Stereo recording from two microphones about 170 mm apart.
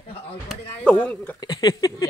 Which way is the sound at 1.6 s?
20° left (ahead or behind).